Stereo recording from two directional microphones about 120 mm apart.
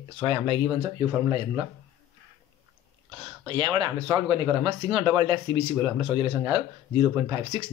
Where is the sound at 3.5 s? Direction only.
40° right (ahead or behind).